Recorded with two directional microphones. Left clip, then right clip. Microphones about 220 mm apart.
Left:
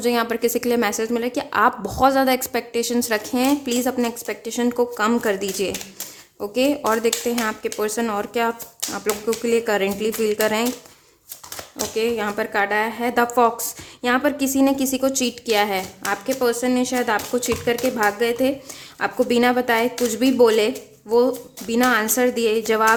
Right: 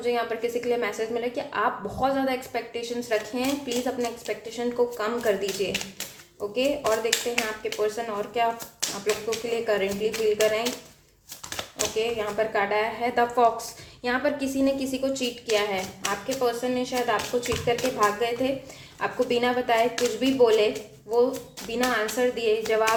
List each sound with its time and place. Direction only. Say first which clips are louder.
0.0 s a woman's voice: left 6 dB; 55° left (ahead or behind)
9.5 s a woman's voice: left 5 dB; 45° left (ahead or behind)
11.9 s a woman's voice: left 5 dB; 45° left (ahead or behind)
21.7 s a woman's voice: left 7 dB; 50° left (ahead or behind)